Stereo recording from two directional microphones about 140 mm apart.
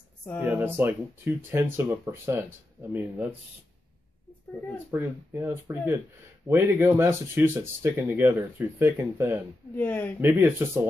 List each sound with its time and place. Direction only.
0.4 s speech: 10° right (ahead or behind)
4.9 s speech: 15° right (ahead or behind)
9.8 s speech: 15° left (ahead or behind)
10.2 s speech: 15° right (ahead or behind)